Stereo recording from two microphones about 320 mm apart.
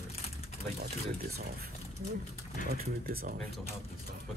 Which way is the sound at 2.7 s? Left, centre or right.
Right.